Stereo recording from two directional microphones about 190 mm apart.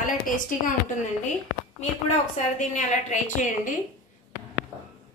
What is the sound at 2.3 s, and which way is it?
A woman's voice, 40° left (ahead or behind).